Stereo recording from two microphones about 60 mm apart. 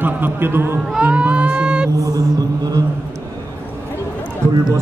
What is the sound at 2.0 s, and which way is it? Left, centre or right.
Mantra, right.